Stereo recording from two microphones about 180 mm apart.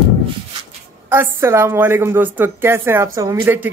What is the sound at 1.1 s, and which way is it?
Speech, 15° right (ahead or behind).